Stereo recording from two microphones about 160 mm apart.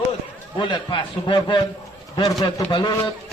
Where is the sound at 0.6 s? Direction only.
30° left (ahead or behind).